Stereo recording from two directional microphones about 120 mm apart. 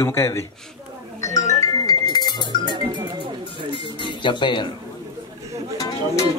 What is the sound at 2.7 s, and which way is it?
Music, 40° right (ahead or behind).